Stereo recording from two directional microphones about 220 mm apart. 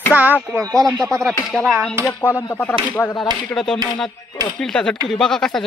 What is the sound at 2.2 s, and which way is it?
Speech, 10° left (ahead or behind).